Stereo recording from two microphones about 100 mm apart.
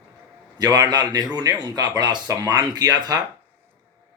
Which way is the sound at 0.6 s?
40° right (ahead or behind).